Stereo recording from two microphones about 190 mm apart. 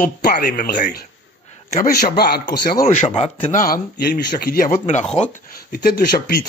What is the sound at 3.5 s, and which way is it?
Speech, 50° left (ahead or behind).